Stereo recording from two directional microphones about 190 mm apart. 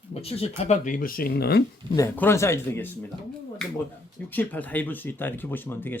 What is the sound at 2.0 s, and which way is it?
Speech, 15° left (ahead or behind).